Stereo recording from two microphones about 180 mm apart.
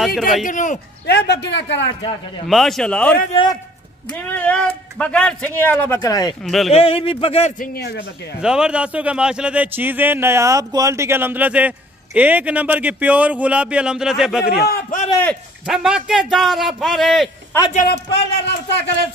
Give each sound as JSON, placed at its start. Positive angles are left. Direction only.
{"t": 0.5, "sound": "speech", "side_deg": 45}
{"t": 1.0, "sound": "a man's voice", "side_deg": 65}
{"t": 2.0, "sound": "a man's voice", "side_deg": 30}
{"t": 2.4, "sound": "a man's voice", "side_deg": 0}
{"t": 6.0, "sound": "a man's voice", "side_deg": 20}
{"t": 6.4, "sound": "a man's voice", "side_deg": 0}
{"t": 6.7, "sound": "a man's voice", "side_deg": 30}
{"t": 7.5, "sound": "speech", "side_deg": 55}
{"t": 8.4, "sound": "speech", "side_deg": -5}
{"t": 14.4, "sound": "speech", "side_deg": 60}
{"t": 15.0, "sound": "speech", "side_deg": 10}
{"t": 15.6, "sound": "a man's voice", "side_deg": -5}
{"t": 18.3, "sound": "a man's voice", "side_deg": 80}